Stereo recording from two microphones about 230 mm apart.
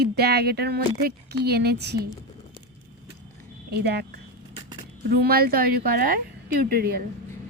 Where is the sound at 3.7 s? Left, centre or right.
Right.